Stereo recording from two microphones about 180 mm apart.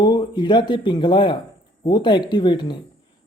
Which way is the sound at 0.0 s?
25° left (ahead or behind).